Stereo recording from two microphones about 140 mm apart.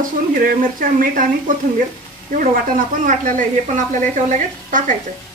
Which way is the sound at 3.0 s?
65° right (ahead or behind).